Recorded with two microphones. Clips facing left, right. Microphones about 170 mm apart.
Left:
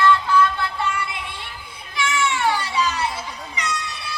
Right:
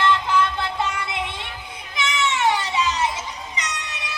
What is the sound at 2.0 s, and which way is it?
Children playing, 20° right (ahead or behind).